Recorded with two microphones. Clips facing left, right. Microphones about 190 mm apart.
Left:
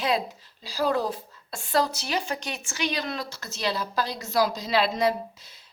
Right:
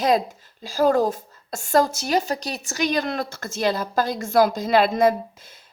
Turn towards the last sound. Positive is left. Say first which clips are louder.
# right 5 dB
turn(degrees=-50)  # may be behind; listen again after turning